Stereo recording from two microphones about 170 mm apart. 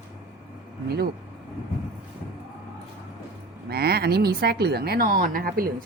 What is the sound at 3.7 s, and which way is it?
Speech, 70° right (ahead or behind).